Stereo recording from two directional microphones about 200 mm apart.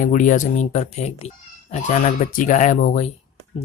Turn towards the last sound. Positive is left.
turn(degrees=40)  # may be behind; listen again after turning